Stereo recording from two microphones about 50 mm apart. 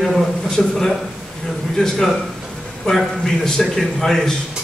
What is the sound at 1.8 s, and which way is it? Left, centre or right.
Speech, centre.